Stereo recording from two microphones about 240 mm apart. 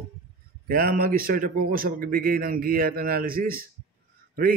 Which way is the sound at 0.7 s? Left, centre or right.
Right.